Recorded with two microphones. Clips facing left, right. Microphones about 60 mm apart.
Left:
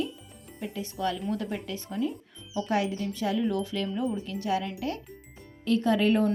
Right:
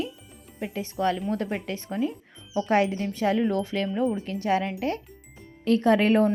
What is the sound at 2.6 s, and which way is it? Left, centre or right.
A woman's voice, right.